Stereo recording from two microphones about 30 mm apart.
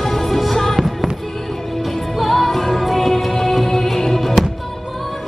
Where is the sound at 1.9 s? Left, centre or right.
Centre.